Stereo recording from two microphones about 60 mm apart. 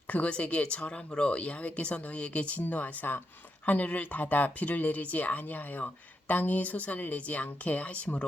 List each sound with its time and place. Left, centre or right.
0.1 s speech: left